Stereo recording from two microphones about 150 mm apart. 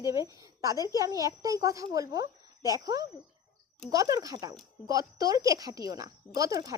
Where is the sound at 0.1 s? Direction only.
20° right (ahead or behind).